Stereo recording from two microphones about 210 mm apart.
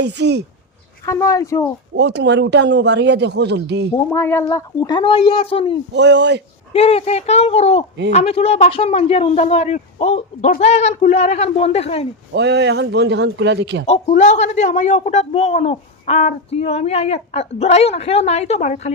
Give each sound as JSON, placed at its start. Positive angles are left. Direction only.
{"t": 0.0, "sound": "speech", "side_deg": -55}
{"t": 1.0, "sound": "speech", "side_deg": 15}
{"t": 2.0, "sound": "speech", "side_deg": -55}
{"t": 3.9, "sound": "a man's voice", "side_deg": 10}
{"t": 5.9, "sound": "speech", "side_deg": -55}
{"t": 6.7, "sound": "a man's voice", "side_deg": 30}
{"t": 12.3, "sound": "speech", "side_deg": -55}
{"t": 13.8, "sound": "a man's voice", "side_deg": 30}